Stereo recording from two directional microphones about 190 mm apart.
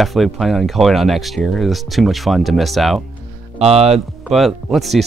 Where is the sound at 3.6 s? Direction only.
35° right (ahead or behind).